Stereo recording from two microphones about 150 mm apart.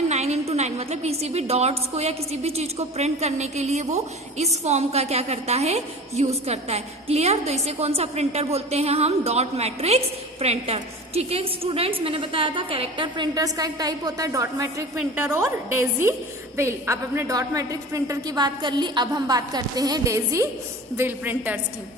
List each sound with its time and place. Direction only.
0.1 s a woman's voice: 45° right (ahead or behind); by 21.6 s 10° right (ahead or behind)